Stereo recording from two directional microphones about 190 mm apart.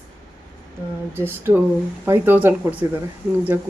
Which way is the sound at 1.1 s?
10° right (ahead or behind).